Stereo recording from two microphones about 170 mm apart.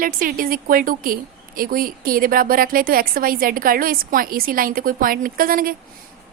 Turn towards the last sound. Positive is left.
turn(degrees=-55)  # may be behind; listen again after turning